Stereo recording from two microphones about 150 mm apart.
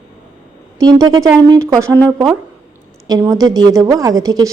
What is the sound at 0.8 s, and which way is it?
Speech, 25° right (ahead or behind).